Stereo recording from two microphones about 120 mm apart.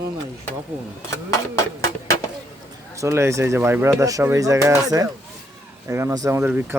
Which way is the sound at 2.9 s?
25° right (ahead or behind).